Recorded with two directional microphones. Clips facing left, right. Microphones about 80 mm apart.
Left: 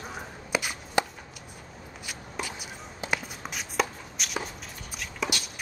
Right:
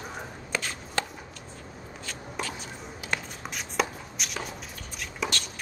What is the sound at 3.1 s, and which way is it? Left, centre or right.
Walk, centre.